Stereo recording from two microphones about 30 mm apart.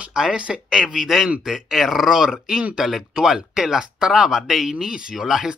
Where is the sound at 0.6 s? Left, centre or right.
Centre.